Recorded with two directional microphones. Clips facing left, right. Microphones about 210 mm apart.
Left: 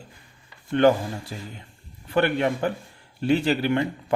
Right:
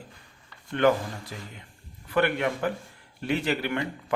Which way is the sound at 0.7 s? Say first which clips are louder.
Left 4 dB; 30° left (ahead or behind).